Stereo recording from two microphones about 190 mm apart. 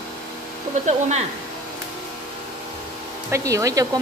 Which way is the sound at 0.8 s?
35° right (ahead or behind).